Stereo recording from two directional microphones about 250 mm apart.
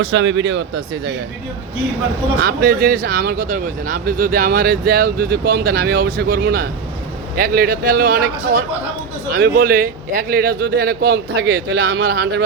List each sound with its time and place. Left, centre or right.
0.0 s speech: right
2.4 s speech: right